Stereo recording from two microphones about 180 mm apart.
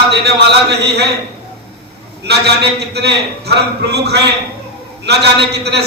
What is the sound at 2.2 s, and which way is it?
A man's voice, 65° right (ahead or behind).